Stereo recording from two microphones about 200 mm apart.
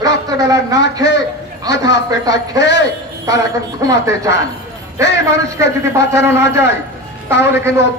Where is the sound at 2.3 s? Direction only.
60° left (ahead or behind).